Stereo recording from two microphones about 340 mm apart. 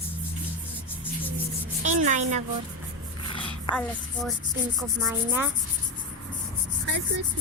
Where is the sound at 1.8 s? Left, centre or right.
Right.